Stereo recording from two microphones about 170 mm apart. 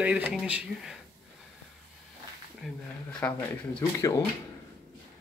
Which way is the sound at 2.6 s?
5° left (ahead or behind).